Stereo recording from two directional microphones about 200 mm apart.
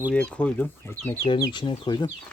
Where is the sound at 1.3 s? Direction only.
25° left (ahead or behind).